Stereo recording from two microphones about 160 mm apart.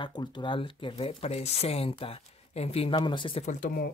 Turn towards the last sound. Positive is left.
turn(degrees=50)  # may be behind; listen again after turning